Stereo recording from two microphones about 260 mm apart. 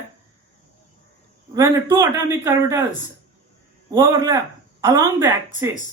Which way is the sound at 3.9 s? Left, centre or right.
Centre.